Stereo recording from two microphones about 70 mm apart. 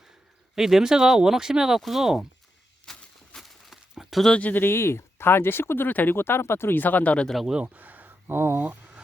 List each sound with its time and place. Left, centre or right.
0.5 s speech: centre
2.8 s a sound: centre
4.3 s speech: centre
7.3 s speech: centre
7.5 s speech: right